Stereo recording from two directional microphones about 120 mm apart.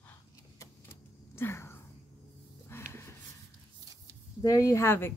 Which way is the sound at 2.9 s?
20° left (ahead or behind).